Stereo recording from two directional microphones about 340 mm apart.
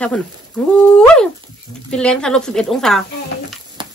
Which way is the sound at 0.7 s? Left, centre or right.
Centre.